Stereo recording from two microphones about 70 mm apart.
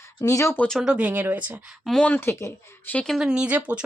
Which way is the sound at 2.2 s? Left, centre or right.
Left.